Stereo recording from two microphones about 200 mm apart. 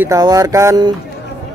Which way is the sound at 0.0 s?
15° right (ahead or behind).